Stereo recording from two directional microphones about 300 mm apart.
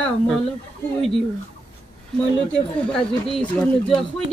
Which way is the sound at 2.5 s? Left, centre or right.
Centre.